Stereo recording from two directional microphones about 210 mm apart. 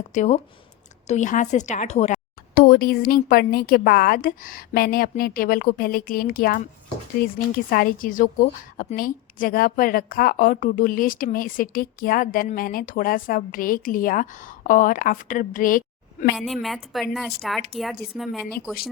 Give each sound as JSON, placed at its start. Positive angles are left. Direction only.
{"t": 0.1, "sound": "a woman's voice", "side_deg": 35}
{"t": 2.6, "sound": "a woman's voice", "side_deg": 45}
{"t": 16.3, "sound": "a woman's voice", "side_deg": 0}